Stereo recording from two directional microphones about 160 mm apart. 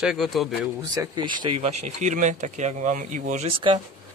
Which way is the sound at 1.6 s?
45° right (ahead or behind).